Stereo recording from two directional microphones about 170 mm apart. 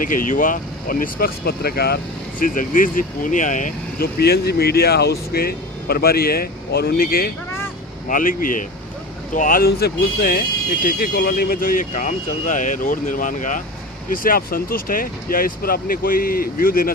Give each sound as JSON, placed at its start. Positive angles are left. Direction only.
{"t": 0.0, "sound": "speech", "side_deg": 50}
{"t": 2.4, "sound": "speech", "side_deg": 55}